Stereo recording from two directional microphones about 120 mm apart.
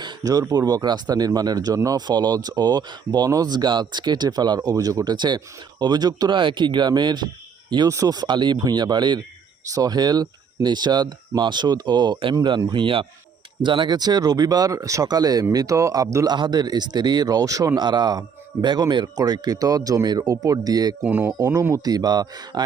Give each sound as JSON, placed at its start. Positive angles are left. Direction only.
{"t": 0.0, "sound": "speech", "side_deg": -35}
{"t": 21.0, "sound": "speech", "side_deg": -15}